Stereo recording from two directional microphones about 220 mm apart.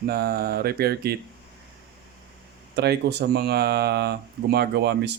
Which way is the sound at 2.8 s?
45° right (ahead or behind).